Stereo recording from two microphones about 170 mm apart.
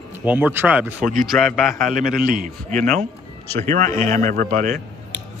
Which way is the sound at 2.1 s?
55° right (ahead or behind).